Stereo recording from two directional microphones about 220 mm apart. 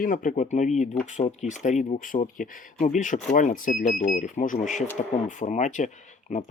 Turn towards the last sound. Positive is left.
turn(degrees=30)  # may be behind; listen again after turning